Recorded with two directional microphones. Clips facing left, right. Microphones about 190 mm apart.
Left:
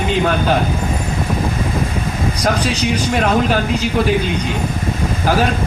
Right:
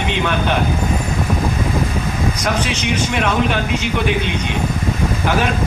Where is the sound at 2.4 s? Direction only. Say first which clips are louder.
Left 7 dB; 35° left (ahead or behind).